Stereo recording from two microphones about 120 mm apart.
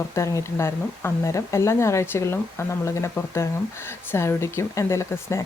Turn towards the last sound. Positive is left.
turn(degrees=25)  # may be behind; listen again after turning